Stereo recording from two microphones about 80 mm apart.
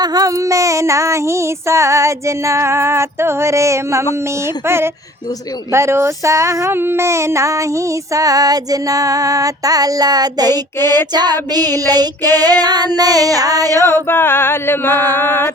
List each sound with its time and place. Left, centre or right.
0.0 s child singing: right
6.7 s female singing: right
10.8 s child singing: right
14.1 s a sound: left